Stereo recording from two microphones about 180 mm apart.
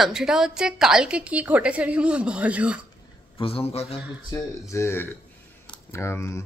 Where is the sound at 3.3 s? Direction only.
30° left (ahead or behind).